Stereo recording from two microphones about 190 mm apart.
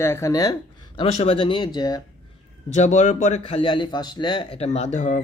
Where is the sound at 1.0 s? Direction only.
35° left (ahead or behind).